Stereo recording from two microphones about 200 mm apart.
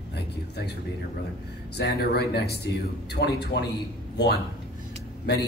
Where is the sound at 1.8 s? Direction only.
55° left (ahead or behind).